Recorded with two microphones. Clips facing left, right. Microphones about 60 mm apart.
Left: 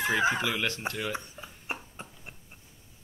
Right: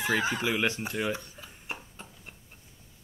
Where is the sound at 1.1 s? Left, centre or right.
Left.